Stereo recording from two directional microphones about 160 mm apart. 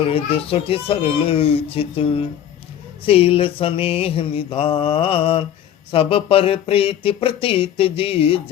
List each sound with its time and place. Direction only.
0.1 s speech: 35° left (ahead or behind)